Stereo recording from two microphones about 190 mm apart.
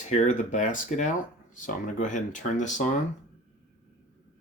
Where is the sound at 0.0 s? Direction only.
40° left (ahead or behind).